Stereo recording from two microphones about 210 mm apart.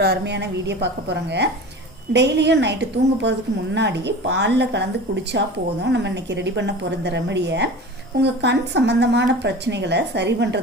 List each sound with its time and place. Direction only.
0.0 s a woman's voice: 50° right (ahead or behind)
3.8 s speech: 55° right (ahead or behind)